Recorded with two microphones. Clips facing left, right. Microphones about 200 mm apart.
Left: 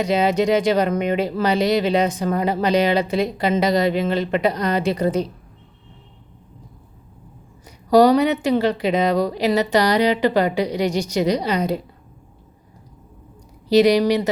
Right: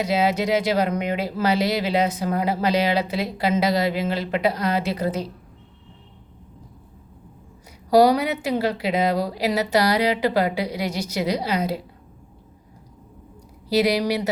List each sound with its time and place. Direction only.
0.0 s speech: 5° right (ahead or behind)
7.9 s a woman's voice: 10° right (ahead or behind)
13.7 s a woman's voice: 5° right (ahead or behind)